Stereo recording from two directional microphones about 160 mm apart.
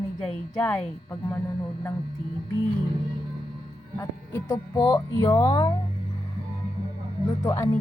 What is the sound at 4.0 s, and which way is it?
Speech, 20° left (ahead or behind).